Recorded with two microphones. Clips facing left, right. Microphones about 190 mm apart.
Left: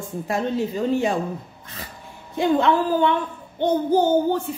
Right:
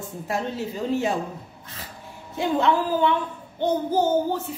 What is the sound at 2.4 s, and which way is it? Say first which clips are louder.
Speech: left 3 dB; 5° right (ahead or behind).